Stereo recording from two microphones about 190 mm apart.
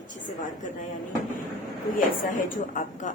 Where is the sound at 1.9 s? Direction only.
45° left (ahead or behind).